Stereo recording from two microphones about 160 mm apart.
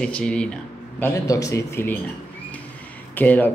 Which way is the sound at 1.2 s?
20° left (ahead or behind).